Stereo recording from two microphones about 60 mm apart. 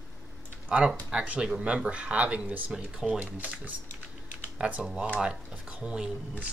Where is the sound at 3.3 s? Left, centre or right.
Right.